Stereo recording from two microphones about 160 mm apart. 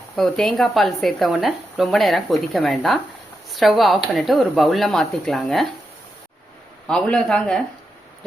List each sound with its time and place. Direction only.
0.2 s speech: 5° left (ahead or behind)
6.8 s speech: 5° left (ahead or behind)